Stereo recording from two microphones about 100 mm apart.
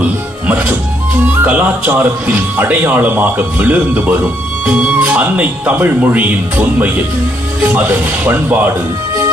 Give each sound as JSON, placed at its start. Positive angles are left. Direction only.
{"t": 0.0, "sound": "music", "side_deg": -15}
{"t": 1.2, "sound": "speech", "side_deg": -20}